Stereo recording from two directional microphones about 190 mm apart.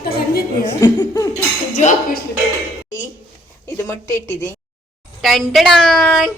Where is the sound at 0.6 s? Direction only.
20° left (ahead or behind).